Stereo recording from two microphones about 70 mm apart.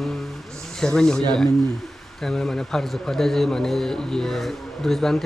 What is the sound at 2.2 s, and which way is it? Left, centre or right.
A man's voice, centre.